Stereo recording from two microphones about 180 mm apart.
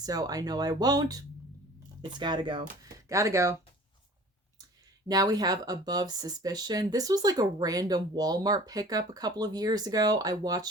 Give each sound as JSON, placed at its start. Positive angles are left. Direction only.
{"t": 0.0, "sound": "speech", "side_deg": -20}
{"t": 5.0, "sound": "speech", "side_deg": -20}